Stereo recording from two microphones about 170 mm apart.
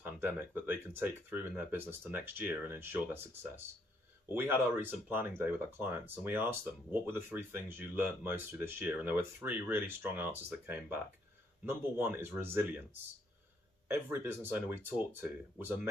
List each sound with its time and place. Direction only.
0.0 s speech: 10° right (ahead or behind)
13.8 s speech: 15° right (ahead or behind)